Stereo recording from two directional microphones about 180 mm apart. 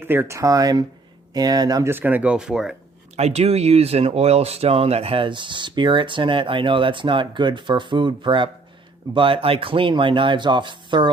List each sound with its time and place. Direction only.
0.0 s speech: 10° right (ahead or behind)
3.2 s speech: 35° right (ahead or behind)